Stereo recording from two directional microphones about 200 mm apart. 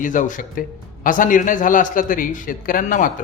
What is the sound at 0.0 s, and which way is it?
A man's voice, 40° left (ahead or behind).